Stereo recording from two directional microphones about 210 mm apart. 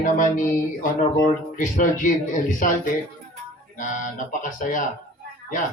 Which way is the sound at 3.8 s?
40° left (ahead or behind).